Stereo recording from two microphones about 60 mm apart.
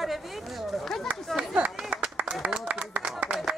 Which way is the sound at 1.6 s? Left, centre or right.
Right.